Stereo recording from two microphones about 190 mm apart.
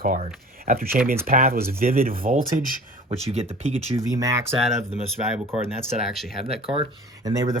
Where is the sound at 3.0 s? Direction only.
35° right (ahead or behind).